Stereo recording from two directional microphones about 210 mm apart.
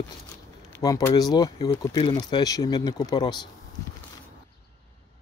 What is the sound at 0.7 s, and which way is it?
Speech, 15° left (ahead or behind).